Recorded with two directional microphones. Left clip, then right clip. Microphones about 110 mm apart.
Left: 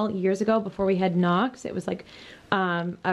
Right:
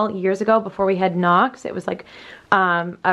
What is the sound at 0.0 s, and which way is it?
A woman's voice, 15° right (ahead or behind).